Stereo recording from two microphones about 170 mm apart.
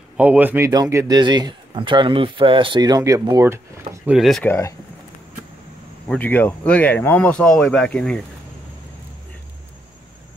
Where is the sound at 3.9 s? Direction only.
5° right (ahead or behind).